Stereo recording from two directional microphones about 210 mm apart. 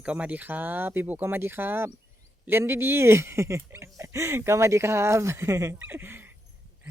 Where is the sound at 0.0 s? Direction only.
5° right (ahead or behind).